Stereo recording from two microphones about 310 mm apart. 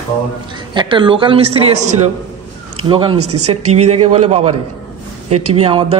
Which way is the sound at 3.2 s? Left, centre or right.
Right.